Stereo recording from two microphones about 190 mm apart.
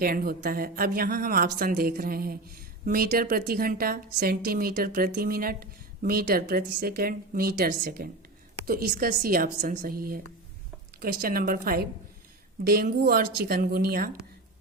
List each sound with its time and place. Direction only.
0.0 s a woman's voice: 50° right (ahead or behind)